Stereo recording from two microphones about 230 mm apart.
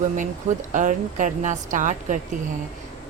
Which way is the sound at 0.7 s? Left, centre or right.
Right.